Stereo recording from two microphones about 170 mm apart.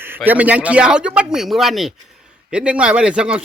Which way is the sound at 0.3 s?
10° right (ahead or behind).